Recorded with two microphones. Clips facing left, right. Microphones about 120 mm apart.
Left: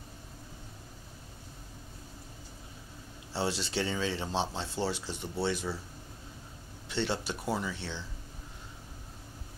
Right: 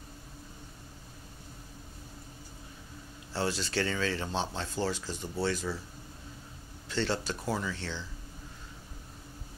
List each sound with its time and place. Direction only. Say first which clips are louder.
3.3 s speech: right 1 dB; 25° left (ahead or behind)
6.9 s speech: right 1 dB; 20° left (ahead or behind)